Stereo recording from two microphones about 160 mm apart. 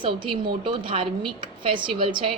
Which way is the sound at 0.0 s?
30° right (ahead or behind).